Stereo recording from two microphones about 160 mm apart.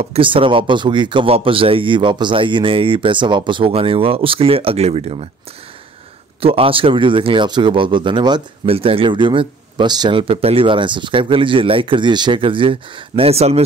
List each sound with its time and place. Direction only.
0.0 s speech: 35° right (ahead or behind)
6.4 s speech: 35° right (ahead or behind)